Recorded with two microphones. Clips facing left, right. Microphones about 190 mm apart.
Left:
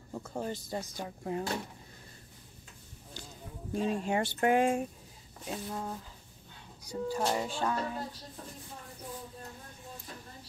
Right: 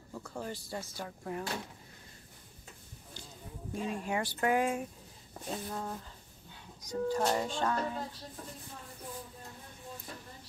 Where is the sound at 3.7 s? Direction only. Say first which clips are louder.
Left 4 dB; 30° left (ahead or behind).